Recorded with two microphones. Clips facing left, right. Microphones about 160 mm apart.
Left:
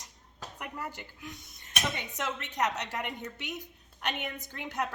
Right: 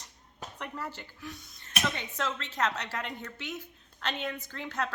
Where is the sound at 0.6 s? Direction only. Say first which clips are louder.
Right 1 dB; 15° left (ahead or behind).